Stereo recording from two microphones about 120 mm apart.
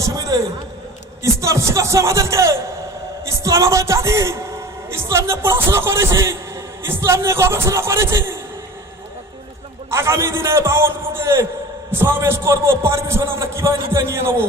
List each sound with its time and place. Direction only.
0.3 s a sound: 30° right (ahead or behind)
1.2 s a man's voice: 25° right (ahead or behind)
9.9 s a man's voice: 25° right (ahead or behind)